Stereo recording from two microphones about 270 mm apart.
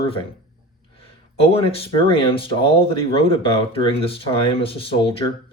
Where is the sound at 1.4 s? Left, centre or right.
Left.